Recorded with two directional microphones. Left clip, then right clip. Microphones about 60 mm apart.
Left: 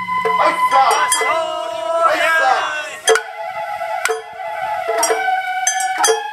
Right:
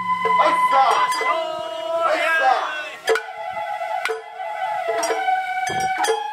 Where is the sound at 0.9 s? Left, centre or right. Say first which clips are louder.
Left 3 dB; left.